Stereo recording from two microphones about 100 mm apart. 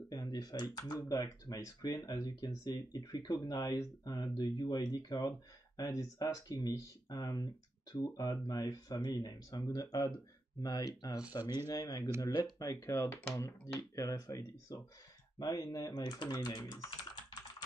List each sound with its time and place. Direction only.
0.1 s speech: 40° left (ahead or behind)